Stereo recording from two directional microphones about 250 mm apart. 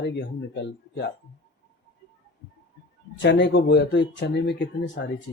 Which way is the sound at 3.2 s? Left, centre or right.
Left.